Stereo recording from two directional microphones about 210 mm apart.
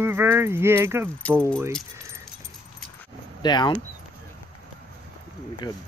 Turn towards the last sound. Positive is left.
turn(degrees=20)  # may be behind; listen again after turning